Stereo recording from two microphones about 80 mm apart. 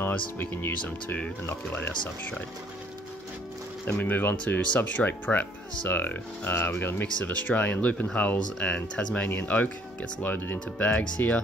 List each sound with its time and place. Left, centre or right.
0.0 s speech: left
3.8 s speech: left